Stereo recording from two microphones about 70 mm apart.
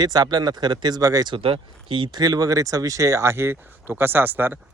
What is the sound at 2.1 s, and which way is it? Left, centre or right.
Speech, right.